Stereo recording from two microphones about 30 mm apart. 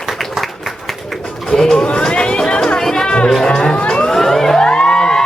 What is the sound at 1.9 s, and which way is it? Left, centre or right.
Music, left.